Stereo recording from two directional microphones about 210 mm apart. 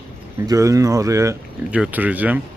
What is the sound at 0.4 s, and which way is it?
Speech, 15° right (ahead or behind).